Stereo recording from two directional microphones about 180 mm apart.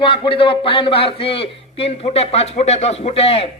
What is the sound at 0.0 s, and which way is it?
A man's voice, 30° left (ahead or behind).